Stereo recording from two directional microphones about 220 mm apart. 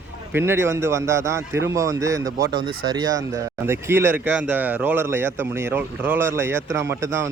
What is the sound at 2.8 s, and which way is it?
Speech, 20° right (ahead or behind).